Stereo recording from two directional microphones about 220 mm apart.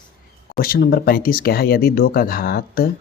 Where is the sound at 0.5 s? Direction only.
40° left (ahead or behind).